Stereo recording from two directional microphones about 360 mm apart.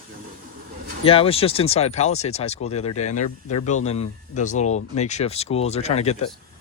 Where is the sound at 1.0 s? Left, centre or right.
Centre.